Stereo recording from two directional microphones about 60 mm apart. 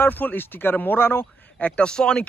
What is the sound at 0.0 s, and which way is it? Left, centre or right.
Speech, left.